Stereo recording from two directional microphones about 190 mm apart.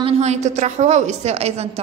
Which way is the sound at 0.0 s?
35° right (ahead or behind).